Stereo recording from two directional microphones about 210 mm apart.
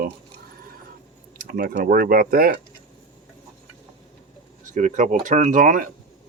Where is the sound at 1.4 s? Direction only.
45° right (ahead or behind).